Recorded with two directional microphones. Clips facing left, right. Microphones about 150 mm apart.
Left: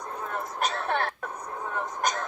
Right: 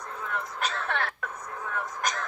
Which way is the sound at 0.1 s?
40° left (ahead or behind).